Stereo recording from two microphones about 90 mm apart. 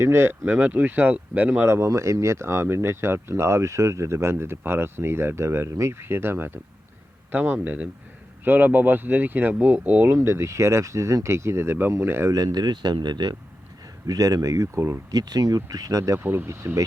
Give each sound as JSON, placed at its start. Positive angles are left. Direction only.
{"t": 0.0, "sound": "speech", "side_deg": -25}
{"t": 10.1, "sound": "speech", "side_deg": -30}
{"t": 12.3, "sound": "speech", "side_deg": -45}
{"t": 14.1, "sound": "speech", "side_deg": -45}
{"t": 15.1, "sound": "speech", "side_deg": -45}
{"t": 16.2, "sound": "speech", "side_deg": -25}